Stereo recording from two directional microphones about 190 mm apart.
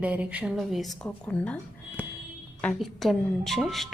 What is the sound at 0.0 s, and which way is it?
A woman's voice, 5° right (ahead or behind).